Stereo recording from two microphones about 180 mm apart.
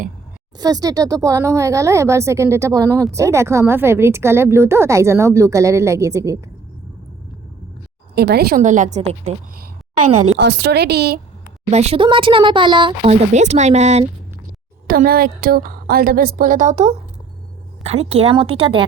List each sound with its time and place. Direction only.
0.6 s a woman's voice: 20° right (ahead or behind)
8.1 s a woman's voice: 65° right (ahead or behind); by 9.3 s 40° right (ahead or behind)
9.6 s a sound: 45° right (ahead or behind)
10.3 s a woman's voice: 70° right (ahead or behind)
11.7 s speech: 35° right (ahead or behind)
13.0 s speech: 40° right (ahead or behind)
14.8 s a woman's voice: 55° right (ahead or behind); by 18.9 s 30° right (ahead or behind)